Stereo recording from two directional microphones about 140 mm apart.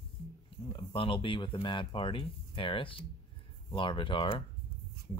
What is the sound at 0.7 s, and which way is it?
Speech, 35° left (ahead or behind).